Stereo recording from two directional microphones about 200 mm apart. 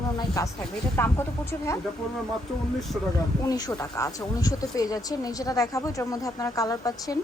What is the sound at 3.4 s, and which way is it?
Speech, 15° left (ahead or behind).